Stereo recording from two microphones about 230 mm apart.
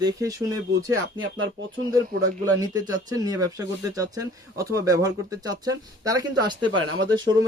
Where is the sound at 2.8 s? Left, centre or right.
Centre.